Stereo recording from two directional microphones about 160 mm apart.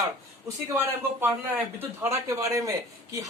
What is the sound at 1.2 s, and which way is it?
A man's voice, 15° right (ahead or behind).